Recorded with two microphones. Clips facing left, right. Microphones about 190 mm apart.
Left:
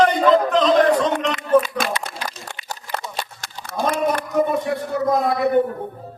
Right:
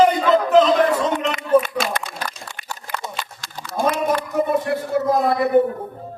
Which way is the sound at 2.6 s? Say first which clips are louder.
Even; 40° left (ahead or behind).